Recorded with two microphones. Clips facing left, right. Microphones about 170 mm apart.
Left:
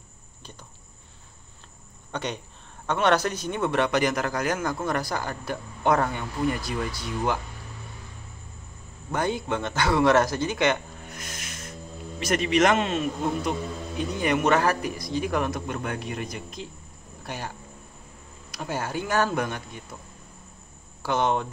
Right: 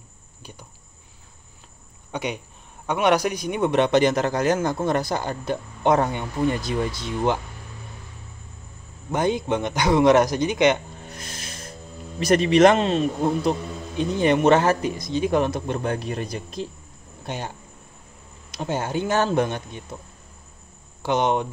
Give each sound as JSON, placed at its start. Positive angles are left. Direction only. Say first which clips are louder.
{"t": 0.4, "sound": "cricket", "louder": "right 3 dB", "side_deg": -10}
{"t": 2.1, "sound": "a man's voice", "louder": "right 3 dB", "side_deg": -10}
{"t": 9.1, "sound": "a man's voice", "louder": "right 4 dB", "side_deg": -20}
{"t": 11.1, "sound": "music", "louder": "right 1 dB", "side_deg": -30}
{"t": 12.2, "sound": "a man's voice", "louder": "right 6 dB", "side_deg": -30}
{"t": 17.2, "sound": "a man's voice", "louder": "right 4 dB", "side_deg": -20}
{"t": 21.0, "sound": "a man's voice", "louder": "right 3 dB", "side_deg": -20}